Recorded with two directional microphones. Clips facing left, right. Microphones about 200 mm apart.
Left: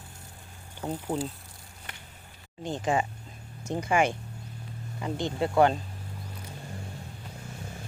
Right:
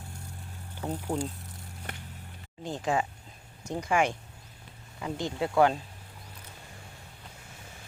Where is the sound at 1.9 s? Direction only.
55° right (ahead or behind).